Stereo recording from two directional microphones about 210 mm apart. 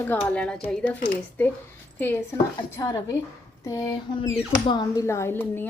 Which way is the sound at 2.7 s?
15° left (ahead or behind).